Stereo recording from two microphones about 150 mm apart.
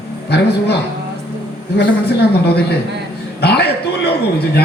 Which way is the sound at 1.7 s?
90° left.